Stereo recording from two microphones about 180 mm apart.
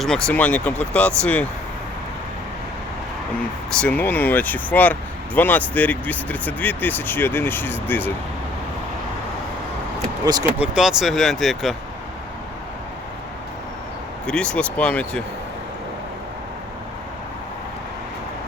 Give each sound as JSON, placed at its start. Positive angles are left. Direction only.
{"t": 0.0, "sound": "speech", "side_deg": 5}
{"t": 3.7, "sound": "speech", "side_deg": 5}
{"t": 10.3, "sound": "speech", "side_deg": -20}
{"t": 10.6, "sound": "speech", "side_deg": -5}
{"t": 14.3, "sound": "speech", "side_deg": 5}